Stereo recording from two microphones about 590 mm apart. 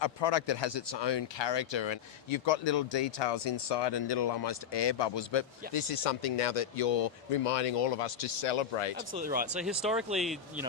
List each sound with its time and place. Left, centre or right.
0.0 s speech: left
9.1 s speech: centre
9.8 s speech: centre